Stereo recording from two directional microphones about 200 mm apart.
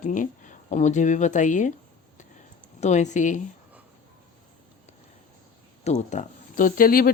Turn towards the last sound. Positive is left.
turn(degrees=45)  # may be behind; listen again after turning